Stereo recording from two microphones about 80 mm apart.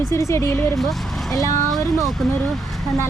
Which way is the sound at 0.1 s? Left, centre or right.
Left.